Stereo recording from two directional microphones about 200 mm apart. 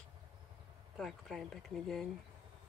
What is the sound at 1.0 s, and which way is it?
Speech, centre (ahead or behind).